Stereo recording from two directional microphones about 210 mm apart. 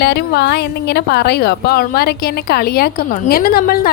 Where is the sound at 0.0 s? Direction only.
50° left (ahead or behind).